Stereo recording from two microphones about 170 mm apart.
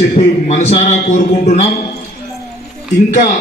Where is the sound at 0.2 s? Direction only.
35° left (ahead or behind).